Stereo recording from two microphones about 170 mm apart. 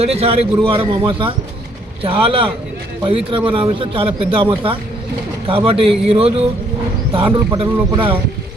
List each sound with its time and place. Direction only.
0.0 s a man's voice: 35° right (ahead or behind)
5.5 s a man's voice: 30° right (ahead or behind)